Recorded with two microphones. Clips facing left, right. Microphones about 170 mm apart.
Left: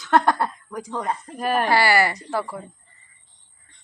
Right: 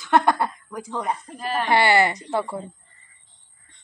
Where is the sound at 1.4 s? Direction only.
55° left (ahead or behind).